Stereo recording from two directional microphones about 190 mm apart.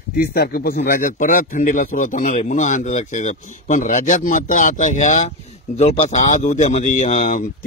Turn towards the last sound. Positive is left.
turn(degrees=40)  # may be behind; listen again after turning